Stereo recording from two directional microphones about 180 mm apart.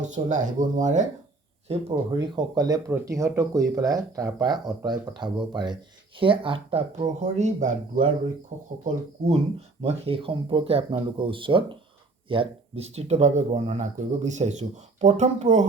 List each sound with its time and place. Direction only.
0.0 s speech: 45° right (ahead or behind)
1.7 s speech: 35° right (ahead or behind)
7.0 s speech: 40° right (ahead or behind)